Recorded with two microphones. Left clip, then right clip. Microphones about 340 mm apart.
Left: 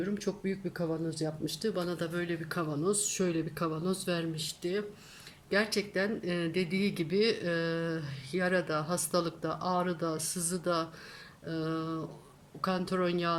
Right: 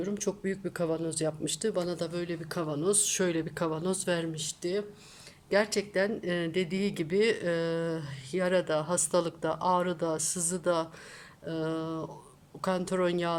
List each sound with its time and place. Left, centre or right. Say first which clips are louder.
0.0 s speech: right 2 dB; centre